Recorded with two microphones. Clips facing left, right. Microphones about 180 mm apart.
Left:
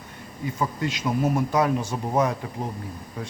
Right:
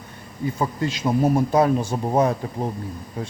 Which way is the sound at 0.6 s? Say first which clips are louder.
Right 2 dB; 30° right (ahead or behind).